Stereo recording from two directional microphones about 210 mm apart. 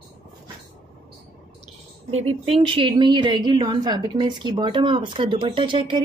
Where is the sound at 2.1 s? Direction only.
30° right (ahead or behind).